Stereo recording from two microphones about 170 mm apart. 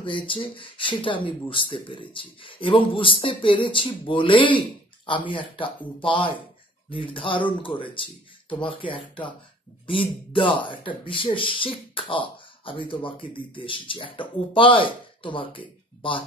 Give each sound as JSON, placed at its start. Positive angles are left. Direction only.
{"t": 0.0, "sound": "speech", "side_deg": 30}